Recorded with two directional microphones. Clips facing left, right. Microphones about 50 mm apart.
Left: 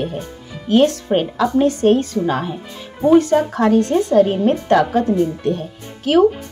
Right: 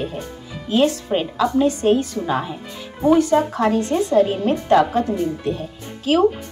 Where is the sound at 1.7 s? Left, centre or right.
Left.